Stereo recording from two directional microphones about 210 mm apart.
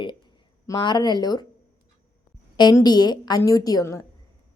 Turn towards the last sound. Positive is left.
turn(degrees=15)  # may be behind; listen again after turning